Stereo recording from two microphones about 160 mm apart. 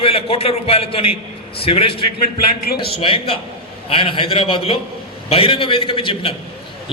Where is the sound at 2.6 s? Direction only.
75° left (ahead or behind).